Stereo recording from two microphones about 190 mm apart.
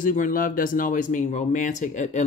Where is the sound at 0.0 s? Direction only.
45° left (ahead or behind).